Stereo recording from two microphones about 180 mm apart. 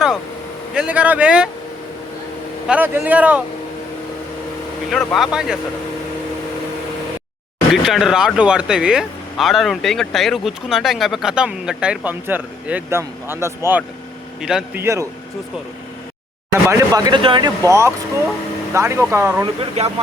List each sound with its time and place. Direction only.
0.7 s speech: 5° right (ahead or behind)
2.6 s speech: 10° right (ahead or behind)
4.9 s speech: centre (ahead or behind)
7.7 s speech: centre (ahead or behind)
16.5 s speech: 15° right (ahead or behind)
17.7 s speech: 15° right (ahead or behind)
19.8 s speech: 35° right (ahead or behind)